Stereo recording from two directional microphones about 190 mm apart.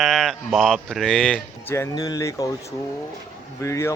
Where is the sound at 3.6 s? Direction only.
15° left (ahead or behind).